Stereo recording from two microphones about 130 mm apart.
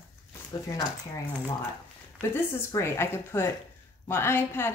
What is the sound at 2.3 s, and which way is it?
A woman's voice, 20° left (ahead or behind).